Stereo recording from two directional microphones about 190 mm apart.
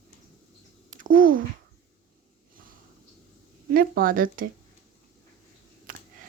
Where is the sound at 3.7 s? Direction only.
50° right (ahead or behind).